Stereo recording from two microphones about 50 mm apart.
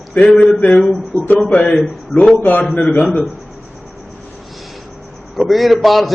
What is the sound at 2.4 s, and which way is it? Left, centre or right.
Speech, left.